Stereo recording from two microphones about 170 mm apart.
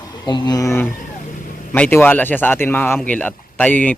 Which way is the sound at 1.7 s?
10° left (ahead or behind).